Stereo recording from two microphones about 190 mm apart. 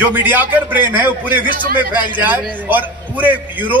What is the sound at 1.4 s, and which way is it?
Speech, 45° right (ahead or behind).